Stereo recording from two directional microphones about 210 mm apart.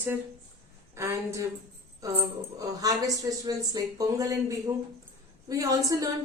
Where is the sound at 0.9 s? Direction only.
15° right (ahead or behind).